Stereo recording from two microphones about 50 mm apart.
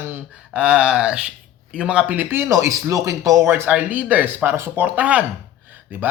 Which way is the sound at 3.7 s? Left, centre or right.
Right.